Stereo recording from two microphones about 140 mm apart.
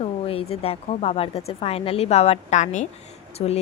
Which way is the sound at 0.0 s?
45° left (ahead or behind).